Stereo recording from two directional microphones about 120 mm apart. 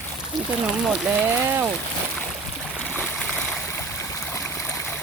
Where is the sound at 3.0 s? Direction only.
5° left (ahead or behind).